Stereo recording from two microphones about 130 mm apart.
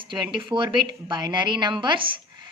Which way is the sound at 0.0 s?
40° right (ahead or behind).